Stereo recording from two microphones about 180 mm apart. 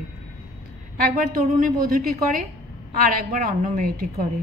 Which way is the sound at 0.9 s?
50° right (ahead or behind).